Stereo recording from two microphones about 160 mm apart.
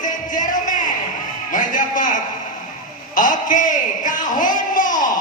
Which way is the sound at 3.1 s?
55° left (ahead or behind).